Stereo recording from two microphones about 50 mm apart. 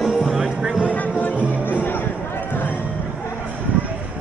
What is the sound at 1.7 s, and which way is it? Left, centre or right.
Music, left.